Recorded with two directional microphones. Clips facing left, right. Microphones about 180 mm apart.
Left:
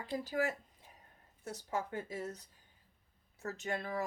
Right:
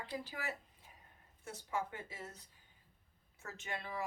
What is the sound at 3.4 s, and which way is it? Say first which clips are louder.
Speech: left 7 dB; 40° left (ahead or behind).